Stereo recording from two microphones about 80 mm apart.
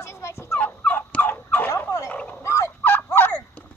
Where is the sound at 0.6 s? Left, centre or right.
Centre.